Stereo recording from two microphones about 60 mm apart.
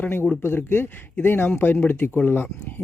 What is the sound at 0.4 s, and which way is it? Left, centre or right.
Speech, left.